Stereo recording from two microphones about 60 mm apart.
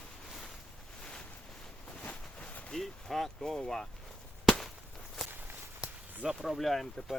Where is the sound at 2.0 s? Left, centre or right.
Left.